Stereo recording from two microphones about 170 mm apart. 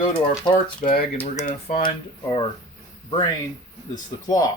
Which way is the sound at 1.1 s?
45° left (ahead or behind).